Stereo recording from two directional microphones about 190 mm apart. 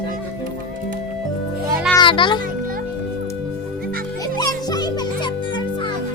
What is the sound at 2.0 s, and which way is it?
Music, 25° left (ahead or behind).